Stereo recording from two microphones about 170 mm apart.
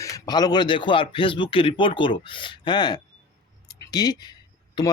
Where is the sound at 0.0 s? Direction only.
20° left (ahead or behind).